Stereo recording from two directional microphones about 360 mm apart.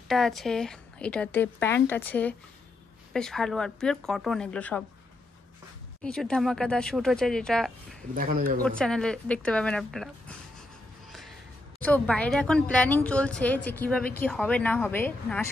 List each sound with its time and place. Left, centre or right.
0.1 s speech: centre
6.0 s speech: centre
8.1 s speech: right
8.6 s speech: centre
11.8 s speech: centre